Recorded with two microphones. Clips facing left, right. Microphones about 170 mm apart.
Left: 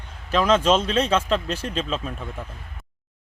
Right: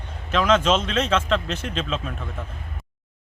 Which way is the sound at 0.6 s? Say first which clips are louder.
Left 2 dB; 35° left (ahead or behind).